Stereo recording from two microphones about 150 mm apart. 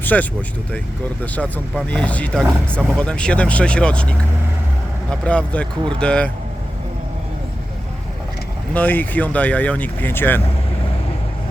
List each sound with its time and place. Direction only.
0.0 s speech: 10° left (ahead or behind)
5.2 s speech: 10° left (ahead or behind)
8.7 s speech: 10° left (ahead or behind)